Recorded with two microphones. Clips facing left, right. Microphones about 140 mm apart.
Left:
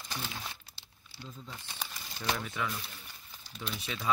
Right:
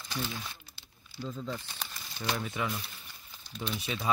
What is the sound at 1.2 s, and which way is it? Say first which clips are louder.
Speech: right 10 dB; 90° right.